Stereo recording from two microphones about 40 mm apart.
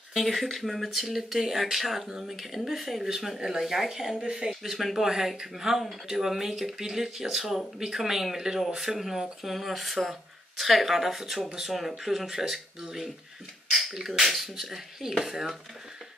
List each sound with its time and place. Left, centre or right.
0.1 s speech: centre
4.2 s speech: centre
4.6 s speech: centre
13.7 s speech: centre